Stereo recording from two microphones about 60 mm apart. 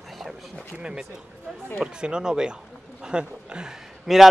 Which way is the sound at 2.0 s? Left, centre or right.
Centre.